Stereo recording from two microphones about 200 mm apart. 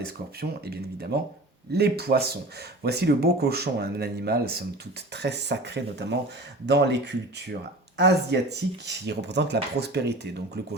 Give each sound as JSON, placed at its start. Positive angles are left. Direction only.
{"t": 0.0, "sound": "speech", "side_deg": -50}